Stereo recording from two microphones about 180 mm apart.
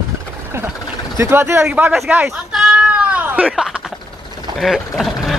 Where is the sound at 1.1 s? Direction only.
15° right (ahead or behind).